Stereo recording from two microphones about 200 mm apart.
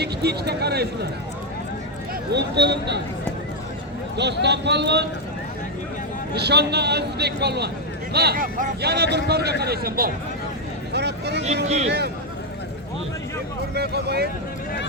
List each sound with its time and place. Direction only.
0.0 s speech: 55° right (ahead or behind)
2.3 s a man's voice: 55° right (ahead or behind)
4.4 s a man's voice: 60° right (ahead or behind)
6.3 s a man's voice: 55° right (ahead or behind)
11.4 s speech: 35° right (ahead or behind)
11.9 s a man's voice: 55° right (ahead or behind)
13.7 s a man's voice: 55° right (ahead or behind)